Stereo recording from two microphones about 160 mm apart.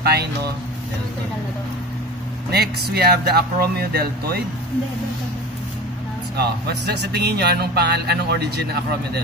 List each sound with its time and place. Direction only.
0.0 s speech: 80° right
2.5 s speech: 85° right
6.3 s a man's voice: 90° right